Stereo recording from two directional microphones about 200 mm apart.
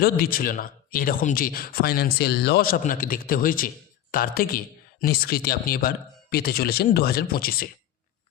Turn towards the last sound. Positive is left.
turn(degrees=50)  # may be behind; listen again after turning